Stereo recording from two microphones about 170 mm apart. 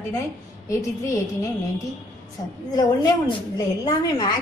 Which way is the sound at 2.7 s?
25° left (ahead or behind).